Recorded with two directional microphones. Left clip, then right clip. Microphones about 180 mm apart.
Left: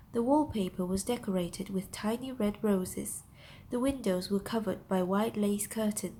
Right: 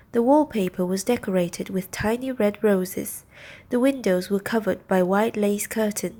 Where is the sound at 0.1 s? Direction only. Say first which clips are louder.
Right 10 dB; 30° right (ahead or behind).